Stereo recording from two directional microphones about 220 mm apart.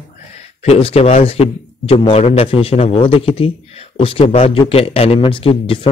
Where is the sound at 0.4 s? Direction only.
30° left (ahead or behind).